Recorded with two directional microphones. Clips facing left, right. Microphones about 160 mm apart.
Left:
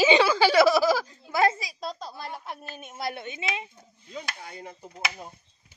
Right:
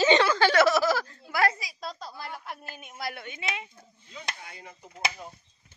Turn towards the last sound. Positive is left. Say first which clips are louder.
# left 5 dB
turn(degrees=35)  # may be behind; listen again after turning